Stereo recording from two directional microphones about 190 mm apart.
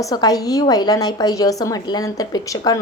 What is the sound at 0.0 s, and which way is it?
A woman's voice, 20° left (ahead or behind).